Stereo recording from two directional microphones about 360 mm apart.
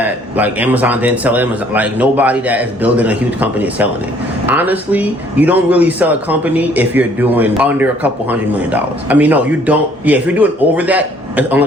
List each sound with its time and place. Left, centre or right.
0.0 s speech: centre